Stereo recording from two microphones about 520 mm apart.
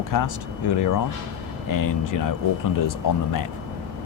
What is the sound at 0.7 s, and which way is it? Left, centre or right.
Speech, left.